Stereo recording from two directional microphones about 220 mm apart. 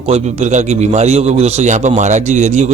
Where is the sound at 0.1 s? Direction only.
30° right (ahead or behind).